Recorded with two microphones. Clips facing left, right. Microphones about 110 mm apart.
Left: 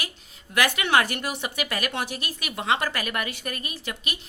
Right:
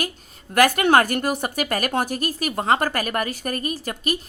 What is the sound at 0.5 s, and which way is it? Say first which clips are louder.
A woman's voice: right 6 dB; 45° right (ahead or behind).